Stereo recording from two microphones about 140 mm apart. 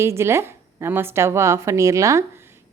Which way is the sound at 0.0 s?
20° right (ahead or behind).